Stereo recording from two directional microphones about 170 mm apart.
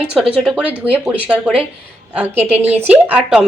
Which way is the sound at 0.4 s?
5° right (ahead or behind).